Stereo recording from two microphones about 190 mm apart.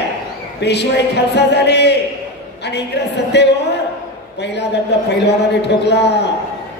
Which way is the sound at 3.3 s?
60° left (ahead or behind).